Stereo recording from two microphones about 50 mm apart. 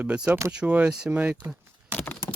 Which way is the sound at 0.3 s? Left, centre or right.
Right.